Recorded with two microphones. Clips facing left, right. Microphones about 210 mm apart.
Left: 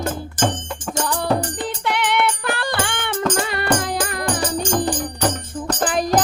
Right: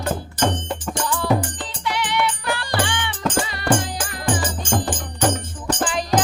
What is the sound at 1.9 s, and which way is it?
Music, 55° left (ahead or behind).